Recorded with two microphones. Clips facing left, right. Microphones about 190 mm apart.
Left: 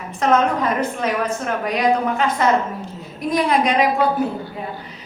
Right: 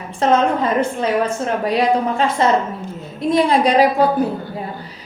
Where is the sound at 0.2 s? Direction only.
30° right (ahead or behind).